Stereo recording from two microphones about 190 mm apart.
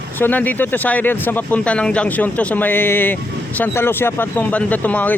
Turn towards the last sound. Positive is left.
turn(degrees=10)  # may be behind; listen again after turning